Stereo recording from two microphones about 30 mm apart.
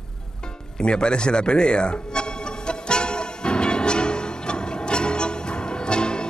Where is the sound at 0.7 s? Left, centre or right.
Left.